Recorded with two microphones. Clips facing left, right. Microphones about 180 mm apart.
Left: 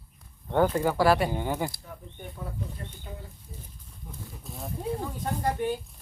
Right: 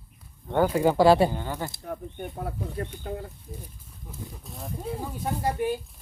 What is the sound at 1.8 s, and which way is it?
Speech, 60° right (ahead or behind).